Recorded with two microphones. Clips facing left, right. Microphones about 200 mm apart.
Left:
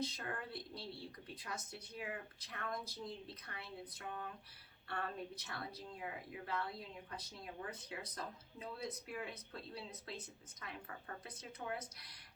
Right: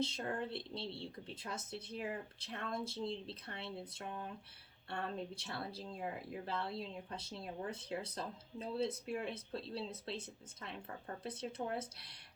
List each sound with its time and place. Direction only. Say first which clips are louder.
0.0 s speech: right 5 dB; 25° right (ahead or behind)